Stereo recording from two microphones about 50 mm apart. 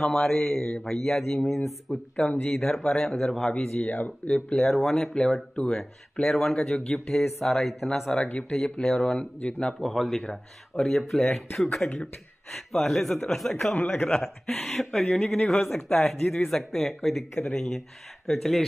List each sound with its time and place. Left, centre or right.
0.0 s speech: centre
1.9 s speech: centre
3.8 s speech: left
4.6 s speech: centre
5.6 s speech: centre
9.2 s speech: left
9.8 s speech: centre
17.4 s speech: centre
17.6 s speech: centre